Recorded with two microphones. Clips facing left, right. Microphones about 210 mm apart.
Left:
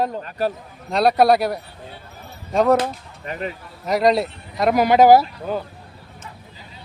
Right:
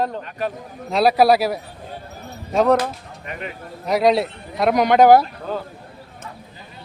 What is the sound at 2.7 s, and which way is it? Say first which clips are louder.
Speech: even; 30° left (ahead or behind).